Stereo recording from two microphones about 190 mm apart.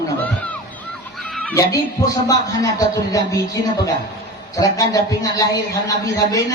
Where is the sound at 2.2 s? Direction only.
20° left (ahead or behind).